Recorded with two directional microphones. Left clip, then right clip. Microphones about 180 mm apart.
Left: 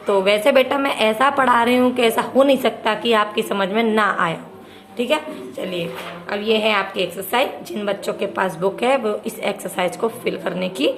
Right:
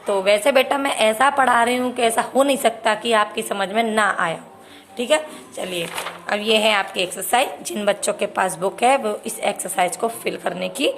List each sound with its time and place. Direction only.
0.1 s a woman's voice: 25° right (ahead or behind)
4.9 s a woman's voice: 35° right (ahead or behind)